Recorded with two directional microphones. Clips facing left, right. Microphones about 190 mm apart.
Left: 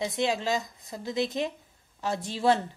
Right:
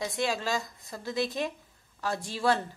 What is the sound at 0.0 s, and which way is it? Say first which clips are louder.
Speech: left 3 dB; 20° left (ahead or behind).